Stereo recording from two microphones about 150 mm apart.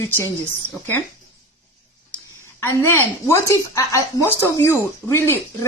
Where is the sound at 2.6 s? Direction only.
15° left (ahead or behind).